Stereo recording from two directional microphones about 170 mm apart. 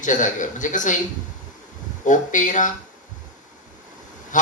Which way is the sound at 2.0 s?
50° left (ahead or behind).